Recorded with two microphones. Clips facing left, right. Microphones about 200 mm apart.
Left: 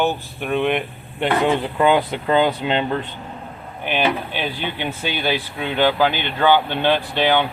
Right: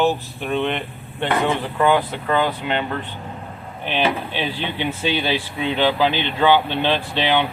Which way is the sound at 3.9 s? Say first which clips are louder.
Left 1 dB; 10° left (ahead or behind).